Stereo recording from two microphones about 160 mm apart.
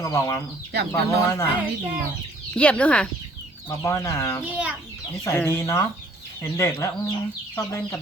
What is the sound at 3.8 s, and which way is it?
Speech, 20° left (ahead or behind).